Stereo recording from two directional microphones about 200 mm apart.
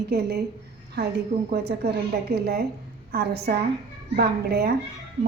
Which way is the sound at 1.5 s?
55° right (ahead or behind).